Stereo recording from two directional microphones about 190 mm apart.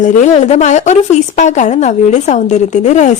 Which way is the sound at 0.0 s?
40° left (ahead or behind).